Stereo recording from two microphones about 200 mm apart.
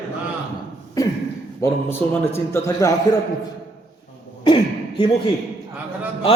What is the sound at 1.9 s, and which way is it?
A man's voice, 10° left (ahead or behind).